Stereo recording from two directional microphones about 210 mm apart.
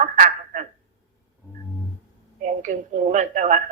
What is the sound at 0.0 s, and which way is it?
Telephone, 35° right (ahead or behind).